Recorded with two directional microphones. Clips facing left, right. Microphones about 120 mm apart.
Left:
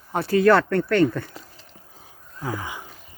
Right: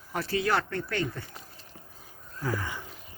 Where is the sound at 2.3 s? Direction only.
15° left (ahead or behind).